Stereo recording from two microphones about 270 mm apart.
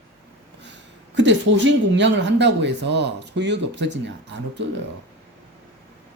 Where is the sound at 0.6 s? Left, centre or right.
Right.